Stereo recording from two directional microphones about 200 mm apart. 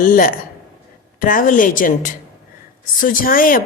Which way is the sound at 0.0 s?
45° left (ahead or behind).